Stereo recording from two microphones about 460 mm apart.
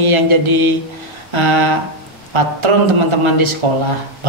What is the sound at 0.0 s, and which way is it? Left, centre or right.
Speech, right.